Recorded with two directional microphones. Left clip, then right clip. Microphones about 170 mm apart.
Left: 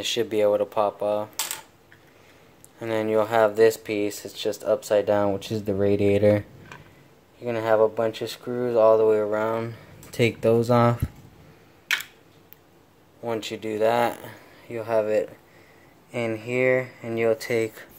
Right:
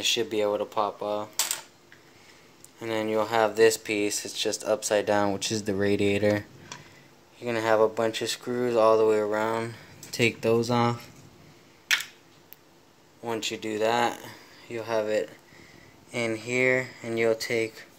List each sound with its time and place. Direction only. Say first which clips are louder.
0.0 s speech: left 3 dB; 20° left (ahead or behind)
2.8 s speech: left 4 dB; 20° left (ahead or behind)
7.3 s speech: left 2 dB; centre (ahead or behind); by 11.0 s 20° left (ahead or behind)
13.2 s speech: left 2 dB; 10° left (ahead or behind)
17.4 s speech: left 3 dB; 15° left (ahead or behind)